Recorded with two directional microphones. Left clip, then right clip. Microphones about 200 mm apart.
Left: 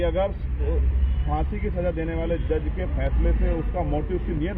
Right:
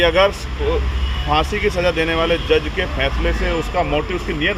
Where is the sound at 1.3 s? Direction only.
40° right (ahead or behind).